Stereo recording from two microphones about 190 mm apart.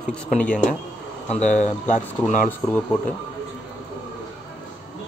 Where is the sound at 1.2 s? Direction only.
35° left (ahead or behind).